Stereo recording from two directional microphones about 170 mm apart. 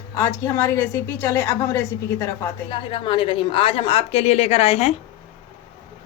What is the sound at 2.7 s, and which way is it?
A woman's voice, 30° left (ahead or behind).